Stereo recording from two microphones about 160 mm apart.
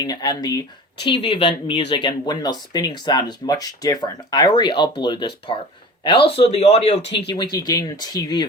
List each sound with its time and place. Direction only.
0.0 s speech: 25° left (ahead or behind); by 7.0 s 45° left (ahead or behind)
7.0 s speech: 90° left
7.3 s speech: 25° left (ahead or behind)